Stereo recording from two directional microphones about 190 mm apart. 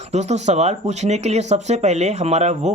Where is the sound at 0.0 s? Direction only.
35° right (ahead or behind).